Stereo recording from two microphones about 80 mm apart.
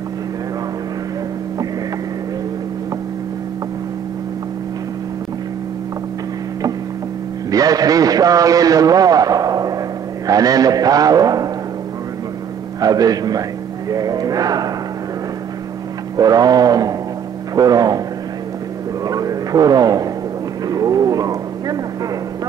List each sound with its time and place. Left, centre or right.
7.5 s a man's voice: right
12.8 s a man's voice: right
13.8 s a sound: right
16.2 s a man's voice: right
19.0 s vehicle: right
20.6 s a sound: right